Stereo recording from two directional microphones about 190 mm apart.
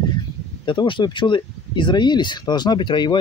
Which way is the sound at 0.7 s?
25° left (ahead or behind).